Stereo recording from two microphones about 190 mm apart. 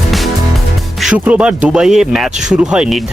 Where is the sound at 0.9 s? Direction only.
5° right (ahead or behind).